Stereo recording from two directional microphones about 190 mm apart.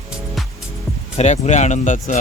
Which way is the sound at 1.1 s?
35° left (ahead or behind).